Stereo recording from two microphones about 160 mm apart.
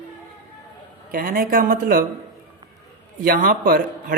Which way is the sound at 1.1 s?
60° right (ahead or behind).